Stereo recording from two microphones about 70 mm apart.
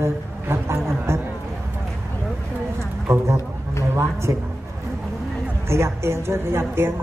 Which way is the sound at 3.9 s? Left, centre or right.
Right.